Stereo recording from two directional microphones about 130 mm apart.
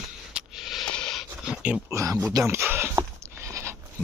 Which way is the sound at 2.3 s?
20° right (ahead or behind).